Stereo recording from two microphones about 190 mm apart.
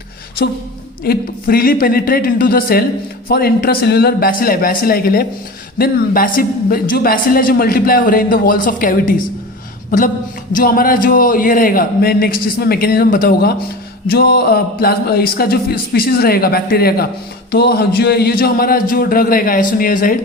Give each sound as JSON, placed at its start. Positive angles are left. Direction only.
{"t": 1.0, "sound": "speech", "side_deg": 50}
{"t": 10.5, "sound": "speech", "side_deg": 50}